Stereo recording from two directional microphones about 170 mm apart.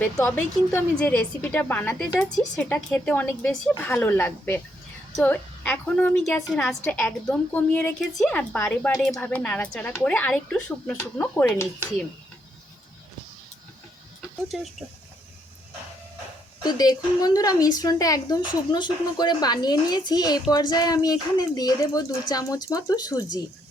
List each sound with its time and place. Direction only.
0.0 s a woman's voice: 5° left (ahead or behind)
14.4 s speech: centre (ahead or behind)
16.6 s speech: 25° left (ahead or behind)